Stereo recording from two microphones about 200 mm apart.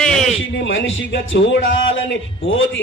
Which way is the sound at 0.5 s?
65° left (ahead or behind).